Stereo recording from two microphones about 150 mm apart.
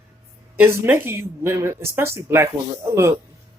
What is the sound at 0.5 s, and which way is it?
Speech, 15° right (ahead or behind).